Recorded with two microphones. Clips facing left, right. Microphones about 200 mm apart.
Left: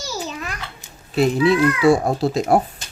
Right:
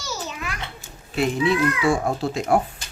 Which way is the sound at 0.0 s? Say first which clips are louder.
Left 3 dB; 35° left (ahead or behind).